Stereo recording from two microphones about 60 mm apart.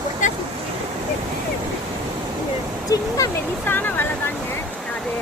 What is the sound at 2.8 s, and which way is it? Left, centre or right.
Speech, left.